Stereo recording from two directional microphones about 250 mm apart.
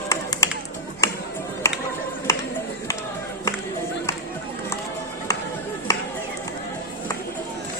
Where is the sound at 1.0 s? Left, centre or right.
Centre.